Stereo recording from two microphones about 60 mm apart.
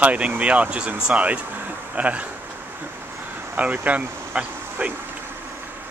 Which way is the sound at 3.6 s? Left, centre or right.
Right.